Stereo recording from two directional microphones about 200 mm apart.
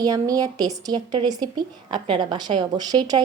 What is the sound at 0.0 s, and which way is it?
Speech, 20° right (ahead or behind).